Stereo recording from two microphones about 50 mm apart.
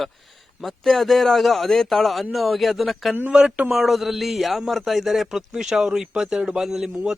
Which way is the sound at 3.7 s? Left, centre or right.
Centre.